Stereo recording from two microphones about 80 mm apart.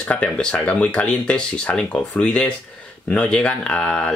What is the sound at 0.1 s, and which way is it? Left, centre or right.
Speech, centre.